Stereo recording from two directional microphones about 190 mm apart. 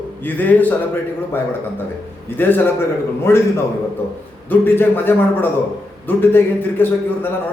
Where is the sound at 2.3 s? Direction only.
10° left (ahead or behind).